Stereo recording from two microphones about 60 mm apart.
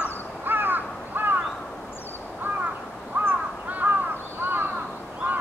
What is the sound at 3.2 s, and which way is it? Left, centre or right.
Crow, right.